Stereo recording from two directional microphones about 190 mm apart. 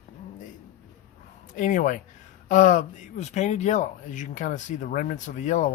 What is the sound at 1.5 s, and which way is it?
Speech, 40° left (ahead or behind).